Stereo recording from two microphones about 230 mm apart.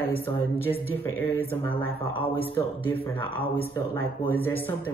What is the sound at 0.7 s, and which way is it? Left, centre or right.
Speech, centre.